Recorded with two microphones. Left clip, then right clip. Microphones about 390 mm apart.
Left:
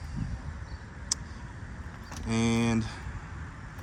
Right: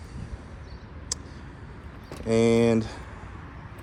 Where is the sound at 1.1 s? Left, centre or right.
Centre.